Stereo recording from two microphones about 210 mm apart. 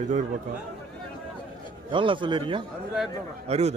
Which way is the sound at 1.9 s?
25° right (ahead or behind).